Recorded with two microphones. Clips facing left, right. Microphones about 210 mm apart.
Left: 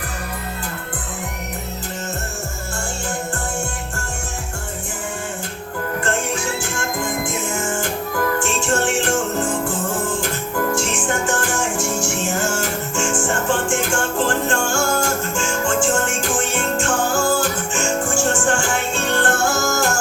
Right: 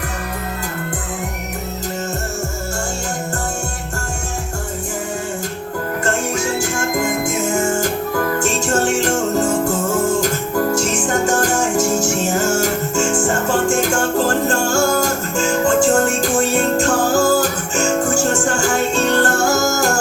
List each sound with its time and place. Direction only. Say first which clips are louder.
6.3 s music: right 5 dB; 40° right (ahead or behind)